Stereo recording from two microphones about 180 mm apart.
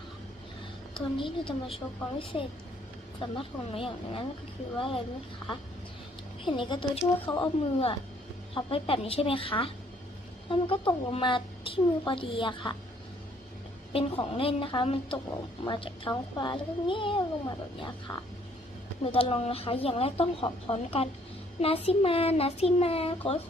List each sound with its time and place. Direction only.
0.9 s a child's voice: 30° left (ahead or behind)
6.4 s a child's voice: 25° left (ahead or behind)
13.9 s a child's voice: 30° left (ahead or behind)